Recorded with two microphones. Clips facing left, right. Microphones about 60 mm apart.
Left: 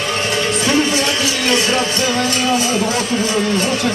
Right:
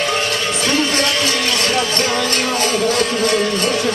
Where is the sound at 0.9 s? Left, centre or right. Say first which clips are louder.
Even; right.